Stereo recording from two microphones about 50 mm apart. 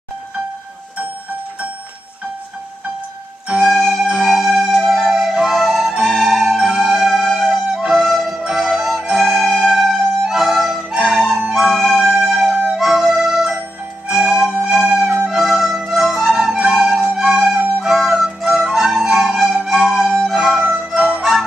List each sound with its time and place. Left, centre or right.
3.5 s music: centre
7.5 s music: centre
15.2 s flute: centre
16.7 s music: centre
17.8 s flute: centre
19.5 s music: centre
20.6 s music: right
21.2 s music: centre